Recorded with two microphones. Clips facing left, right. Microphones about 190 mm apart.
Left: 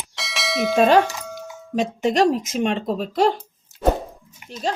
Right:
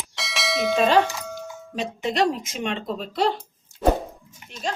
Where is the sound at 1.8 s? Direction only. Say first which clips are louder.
Left 5 dB; 45° left (ahead or behind).